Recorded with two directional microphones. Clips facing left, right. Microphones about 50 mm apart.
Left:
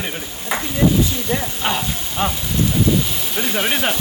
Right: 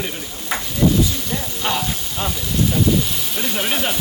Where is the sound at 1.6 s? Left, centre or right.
Centre.